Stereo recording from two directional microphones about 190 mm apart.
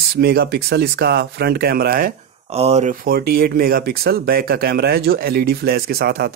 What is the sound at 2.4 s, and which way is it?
Speech, 35° right (ahead or behind).